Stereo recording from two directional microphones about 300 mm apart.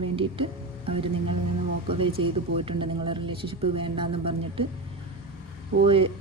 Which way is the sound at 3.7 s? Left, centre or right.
Centre.